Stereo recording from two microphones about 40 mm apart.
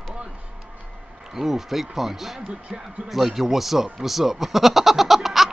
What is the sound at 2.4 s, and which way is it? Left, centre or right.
Music, right.